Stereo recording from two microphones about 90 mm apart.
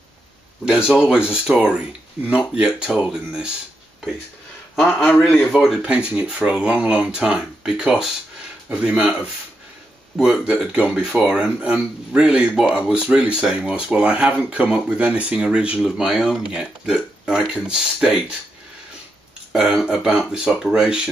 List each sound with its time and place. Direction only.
0.7 s speech: 10° right (ahead or behind)
4.7 s a man's voice: 15° left (ahead or behind)
5.9 s speech: 10° right (ahead or behind)
19.5 s speech: 5° right (ahead or behind)